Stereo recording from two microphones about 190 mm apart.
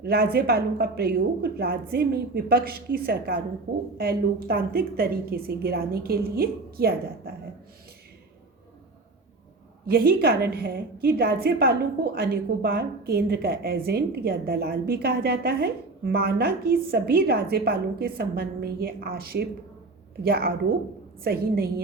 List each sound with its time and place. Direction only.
0.0 s a woman's voice: 55° right (ahead or behind)
9.8 s a woman's voice: 55° right (ahead or behind)